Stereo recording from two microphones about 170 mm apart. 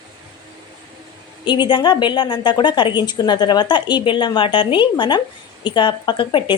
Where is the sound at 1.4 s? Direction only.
25° left (ahead or behind).